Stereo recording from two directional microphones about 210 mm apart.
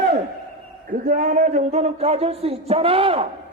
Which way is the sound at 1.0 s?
40° right (ahead or behind).